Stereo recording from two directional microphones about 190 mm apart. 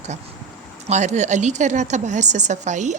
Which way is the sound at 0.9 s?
35° right (ahead or behind).